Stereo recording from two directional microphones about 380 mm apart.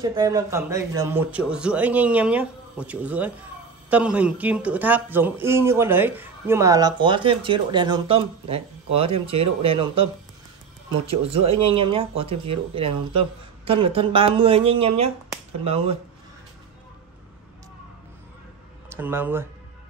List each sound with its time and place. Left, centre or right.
0.0 s a man's voice: centre
11.1 s a man's voice: centre
18.9 s speech: centre